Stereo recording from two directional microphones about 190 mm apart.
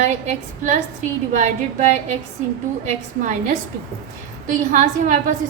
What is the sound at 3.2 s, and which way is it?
Speech, 40° right (ahead or behind).